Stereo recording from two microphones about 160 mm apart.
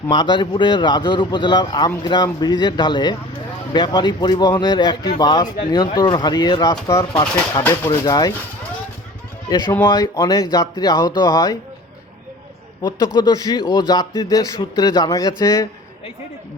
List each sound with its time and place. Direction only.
0.1 s a man's voice: 30° left (ahead or behind); by 7.9 s 10° left (ahead or behind)
7.9 s a man's voice: 25° left (ahead or behind)
9.5 s a man's voice: 25° left (ahead or behind)
13.1 s a man's voice: 25° left (ahead or behind)